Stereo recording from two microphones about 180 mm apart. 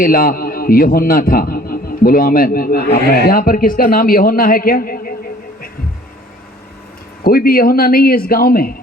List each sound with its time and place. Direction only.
0.0 s a man's voice: 55° left (ahead or behind)
7.3 s speech: 55° left (ahead or behind)